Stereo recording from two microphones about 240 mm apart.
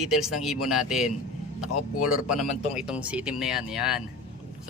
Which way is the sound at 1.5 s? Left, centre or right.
Left.